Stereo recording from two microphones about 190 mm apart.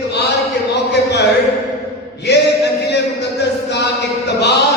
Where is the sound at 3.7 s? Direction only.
65° left (ahead or behind).